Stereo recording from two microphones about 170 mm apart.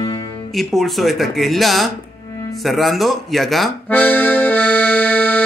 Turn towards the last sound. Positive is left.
turn(degrees=10)  # may be behind; listen again after turning